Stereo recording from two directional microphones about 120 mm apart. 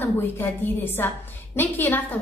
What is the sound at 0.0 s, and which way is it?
A woman's voice, 15° left (ahead or behind).